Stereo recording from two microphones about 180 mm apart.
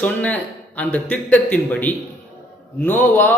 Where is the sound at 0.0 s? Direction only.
10° left (ahead or behind).